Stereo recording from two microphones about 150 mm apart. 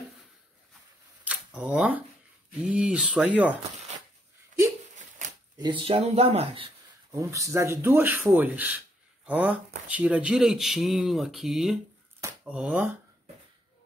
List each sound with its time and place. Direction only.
1.2 s camera: 5° right (ahead or behind)
2.6 s speech: 5° right (ahead or behind)
5.6 s speech: 35° right (ahead or behind)
7.1 s speech: 20° right (ahead or behind)